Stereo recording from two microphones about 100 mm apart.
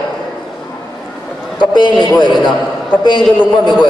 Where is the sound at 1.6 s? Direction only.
45° left (ahead or behind).